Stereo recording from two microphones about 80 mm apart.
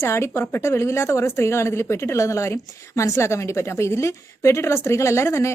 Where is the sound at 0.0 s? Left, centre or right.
Left.